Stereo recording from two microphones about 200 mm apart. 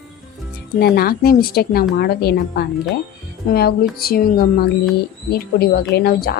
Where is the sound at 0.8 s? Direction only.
50° left (ahead or behind).